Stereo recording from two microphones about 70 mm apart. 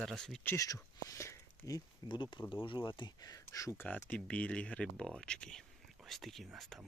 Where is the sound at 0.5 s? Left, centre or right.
Left.